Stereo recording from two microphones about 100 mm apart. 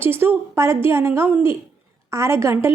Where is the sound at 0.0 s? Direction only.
20° right (ahead or behind).